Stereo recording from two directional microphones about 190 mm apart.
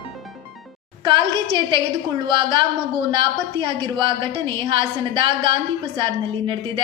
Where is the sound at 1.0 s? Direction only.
25° right (ahead or behind).